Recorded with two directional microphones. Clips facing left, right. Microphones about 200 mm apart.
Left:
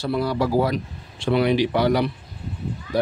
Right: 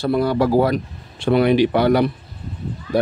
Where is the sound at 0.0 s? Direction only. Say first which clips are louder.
Right 5 dB; 55° right (ahead or behind).